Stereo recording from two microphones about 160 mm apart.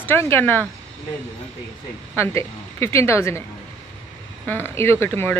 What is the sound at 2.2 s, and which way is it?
A woman's voice, 15° left (ahead or behind).